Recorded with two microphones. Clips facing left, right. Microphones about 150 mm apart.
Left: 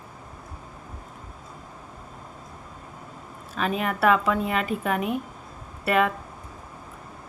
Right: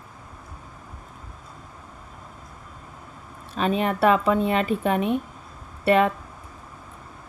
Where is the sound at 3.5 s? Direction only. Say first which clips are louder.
Right 3 dB; 25° right (ahead or behind).